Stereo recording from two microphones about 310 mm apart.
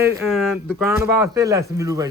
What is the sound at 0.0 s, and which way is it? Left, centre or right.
Speech, centre.